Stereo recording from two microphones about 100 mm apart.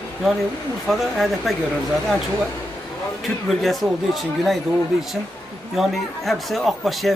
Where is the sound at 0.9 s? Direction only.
Centre (ahead or behind).